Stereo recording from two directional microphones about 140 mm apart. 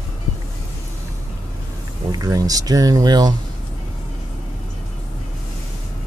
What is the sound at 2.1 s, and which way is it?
Speech, 25° right (ahead or behind).